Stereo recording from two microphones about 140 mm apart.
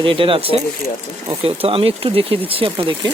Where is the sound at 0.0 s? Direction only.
40° right (ahead or behind).